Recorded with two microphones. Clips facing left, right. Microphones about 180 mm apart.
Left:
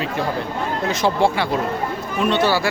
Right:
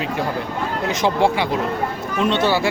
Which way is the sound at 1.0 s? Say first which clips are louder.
Right 1 dB; 15° right (ahead or behind).